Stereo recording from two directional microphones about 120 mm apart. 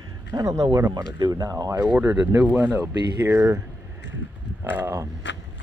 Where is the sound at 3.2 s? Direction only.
20° right (ahead or behind).